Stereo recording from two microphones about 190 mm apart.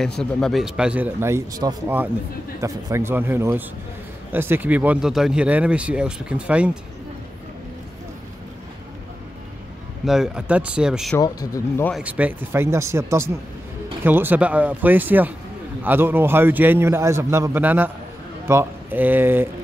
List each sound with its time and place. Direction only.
0.2 s speech: centre (ahead or behind)
10.0 s speech: 5° right (ahead or behind)
11.1 s speech: 20° left (ahead or behind)
11.9 s speech: 5° right (ahead or behind)